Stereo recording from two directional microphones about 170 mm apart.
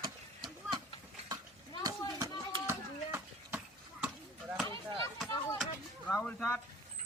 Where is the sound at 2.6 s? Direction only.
15° right (ahead or behind).